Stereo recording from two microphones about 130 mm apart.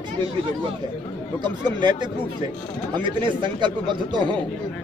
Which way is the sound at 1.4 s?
35° right (ahead or behind).